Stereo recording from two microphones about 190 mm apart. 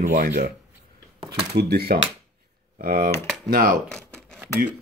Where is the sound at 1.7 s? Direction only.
55° right (ahead or behind).